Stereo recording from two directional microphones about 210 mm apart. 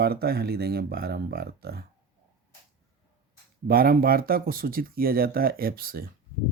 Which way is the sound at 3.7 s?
45° right (ahead or behind).